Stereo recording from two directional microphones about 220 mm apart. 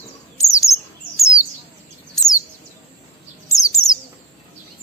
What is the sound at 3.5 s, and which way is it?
Bird, 15° left (ahead or behind).